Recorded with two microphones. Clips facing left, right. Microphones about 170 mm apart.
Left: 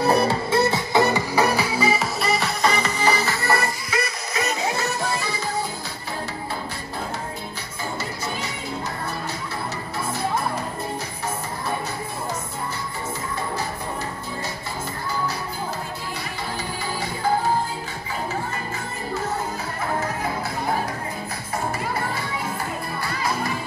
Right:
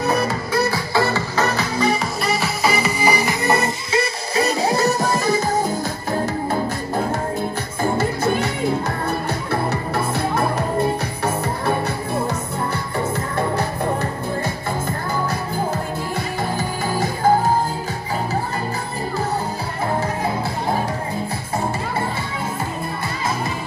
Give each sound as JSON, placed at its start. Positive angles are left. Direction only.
{"t": 0.0, "sound": "music", "side_deg": 30}